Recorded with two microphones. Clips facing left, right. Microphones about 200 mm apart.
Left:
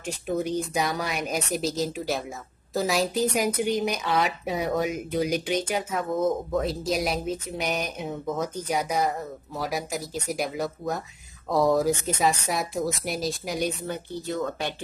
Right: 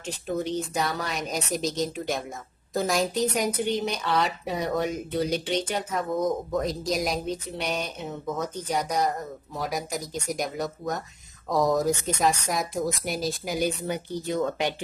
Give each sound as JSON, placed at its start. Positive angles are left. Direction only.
{"t": 0.0, "sound": "a woman's voice", "side_deg": 10}
{"t": 13.8, "sound": "speech", "side_deg": -15}